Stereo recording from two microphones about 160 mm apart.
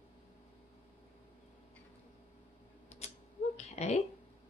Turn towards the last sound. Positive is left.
turn(degrees=40)  # may be behind; listen again after turning